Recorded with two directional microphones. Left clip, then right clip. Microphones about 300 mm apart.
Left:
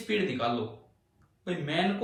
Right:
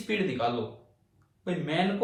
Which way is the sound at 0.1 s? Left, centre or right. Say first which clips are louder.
Even; right.